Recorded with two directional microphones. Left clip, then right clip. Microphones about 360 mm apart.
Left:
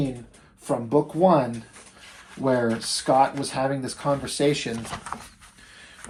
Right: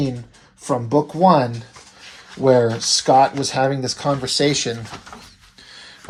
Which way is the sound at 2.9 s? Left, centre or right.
Centre.